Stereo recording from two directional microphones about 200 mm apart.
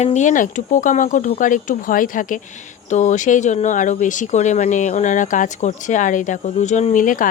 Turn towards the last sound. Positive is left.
turn(degrees=40)  # may be behind; listen again after turning